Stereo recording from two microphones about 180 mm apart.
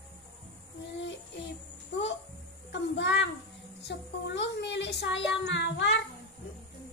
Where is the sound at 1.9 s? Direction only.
90° left.